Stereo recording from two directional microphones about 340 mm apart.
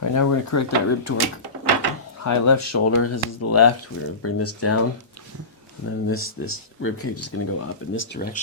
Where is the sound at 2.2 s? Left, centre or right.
Left.